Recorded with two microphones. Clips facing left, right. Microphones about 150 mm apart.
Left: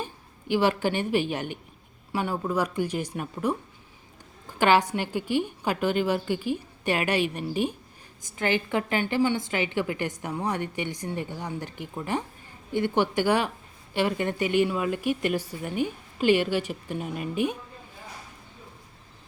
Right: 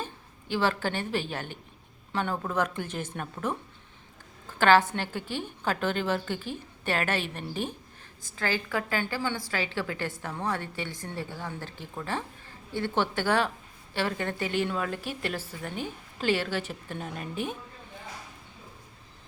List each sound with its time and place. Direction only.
0.0 s a woman's voice: 15° left (ahead or behind)